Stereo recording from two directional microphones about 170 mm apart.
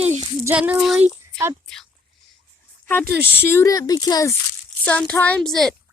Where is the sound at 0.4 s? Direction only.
10° right (ahead or behind).